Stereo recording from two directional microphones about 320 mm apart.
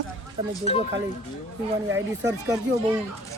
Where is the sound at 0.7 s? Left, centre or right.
Centre.